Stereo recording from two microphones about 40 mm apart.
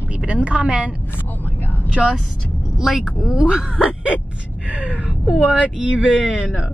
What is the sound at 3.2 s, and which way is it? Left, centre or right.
A woman's voice, right.